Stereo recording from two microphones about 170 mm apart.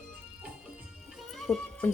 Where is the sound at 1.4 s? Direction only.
5° left (ahead or behind).